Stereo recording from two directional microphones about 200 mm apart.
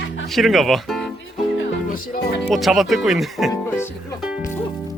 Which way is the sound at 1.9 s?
50° left (ahead or behind).